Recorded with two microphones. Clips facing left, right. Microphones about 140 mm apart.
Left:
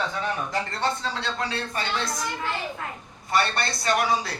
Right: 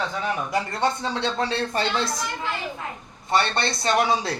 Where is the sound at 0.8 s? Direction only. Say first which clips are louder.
Right 4 dB; 20° right (ahead or behind).